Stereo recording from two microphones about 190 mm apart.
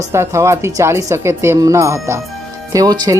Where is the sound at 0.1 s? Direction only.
15° right (ahead or behind).